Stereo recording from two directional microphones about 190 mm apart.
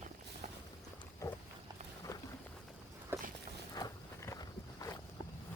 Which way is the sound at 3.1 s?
10° right (ahead or behind).